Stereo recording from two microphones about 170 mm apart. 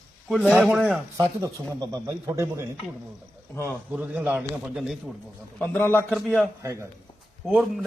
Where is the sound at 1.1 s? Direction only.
20° right (ahead or behind).